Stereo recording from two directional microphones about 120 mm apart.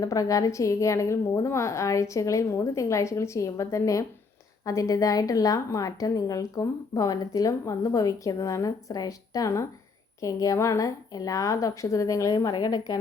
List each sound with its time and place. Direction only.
0.0 s a woman's voice: 30° left (ahead or behind)